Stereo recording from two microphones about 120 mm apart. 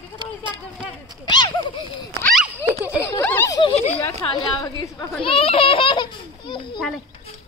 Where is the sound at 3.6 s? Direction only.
60° left (ahead or behind).